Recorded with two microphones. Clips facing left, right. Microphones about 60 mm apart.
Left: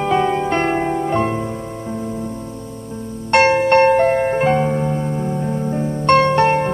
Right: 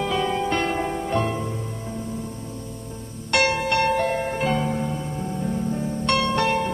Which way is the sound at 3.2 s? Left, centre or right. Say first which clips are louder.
Left 8 dB; left.